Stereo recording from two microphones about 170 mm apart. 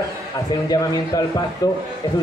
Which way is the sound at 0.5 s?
20° left (ahead or behind).